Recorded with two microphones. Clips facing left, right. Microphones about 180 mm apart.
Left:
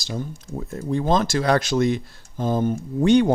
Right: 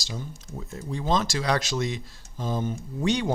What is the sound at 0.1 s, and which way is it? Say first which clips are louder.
Speech: left 7 dB; 50° left (ahead or behind).